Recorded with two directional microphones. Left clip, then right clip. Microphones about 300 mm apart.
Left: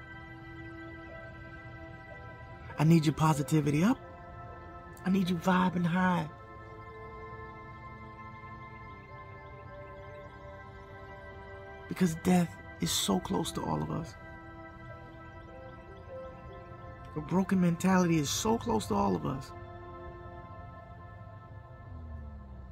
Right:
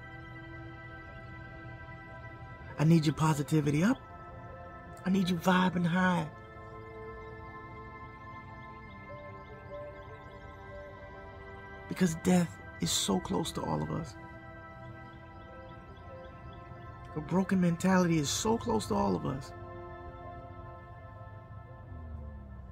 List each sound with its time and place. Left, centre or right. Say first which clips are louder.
2.8 s speech: left 1 dB; centre
5.0 s speech: right 1 dB; centre
11.9 s speech: even; centre
17.1 s speech: even; centre